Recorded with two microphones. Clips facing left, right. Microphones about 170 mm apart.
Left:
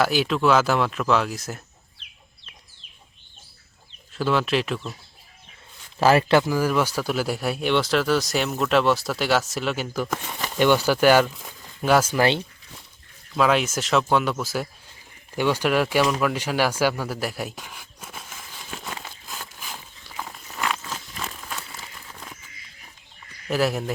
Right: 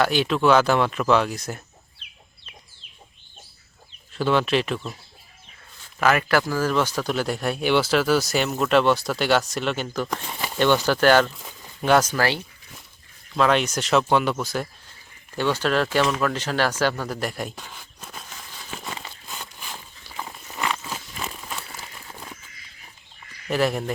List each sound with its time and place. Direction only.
0.0 s speech: 5° left (ahead or behind)
4.1 s speech: centre (ahead or behind)
6.0 s a man's voice: 30° left (ahead or behind)
6.5 s speech: 10° left (ahead or behind)
10.2 s speech: 10° right (ahead or behind)
10.6 s speech: 10° left (ahead or behind)
12.1 s speech: 20° left (ahead or behind)
13.3 s speech: 5° left (ahead or behind)
16.2 s a sound: 10° left (ahead or behind); by 21.6 s 5° right (ahead or behind)
23.5 s speech: centre (ahead or behind)